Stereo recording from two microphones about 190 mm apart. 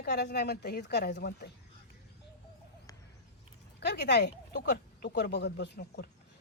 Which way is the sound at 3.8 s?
60° left (ahead or behind).